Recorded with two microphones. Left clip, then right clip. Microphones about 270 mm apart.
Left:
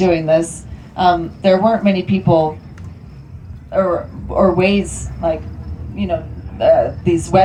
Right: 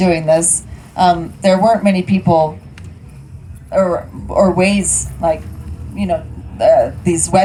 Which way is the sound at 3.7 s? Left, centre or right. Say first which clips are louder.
Right 2 dB; right.